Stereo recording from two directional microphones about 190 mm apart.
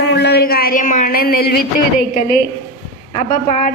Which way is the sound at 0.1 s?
60° left (ahead or behind).